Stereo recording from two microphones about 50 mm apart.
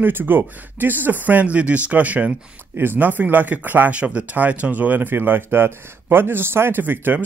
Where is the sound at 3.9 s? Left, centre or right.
Right.